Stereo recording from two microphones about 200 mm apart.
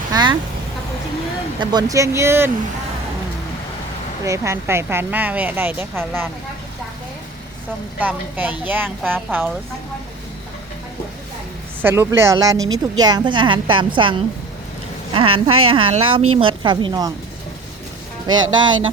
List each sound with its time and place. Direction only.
0.1 s vehicle: 20° right (ahead or behind)
1.5 s speech: 20° right (ahead or behind)
4.2 s speech: 15° right (ahead or behind)
7.9 s speech: 10° right (ahead or behind)
11.8 s a woman's voice: 10° right (ahead or behind)
18.3 s a woman's voice: 20° right (ahead or behind)